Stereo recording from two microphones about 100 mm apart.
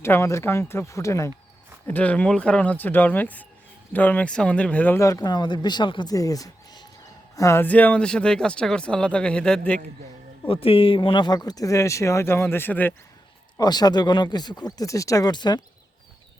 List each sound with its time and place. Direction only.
0.0 s speech: 25° left (ahead or behind)
1.9 s speech: 15° left (ahead or behind)
4.9 s speech: 35° left (ahead or behind); by 6.1 s 50° left (ahead or behind)
6.1 s a sound: 35° left (ahead or behind)
7.3 s speech: 30° left (ahead or behind)
7.6 s speech: 15° left (ahead or behind)
10.4 s speech: 65° left (ahead or behind); by 12.9 s 20° left (ahead or behind)
13.6 s speech: 45° left (ahead or behind)